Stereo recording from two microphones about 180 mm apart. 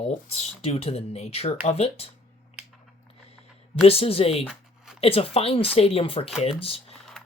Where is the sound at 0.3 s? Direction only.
35° left (ahead or behind).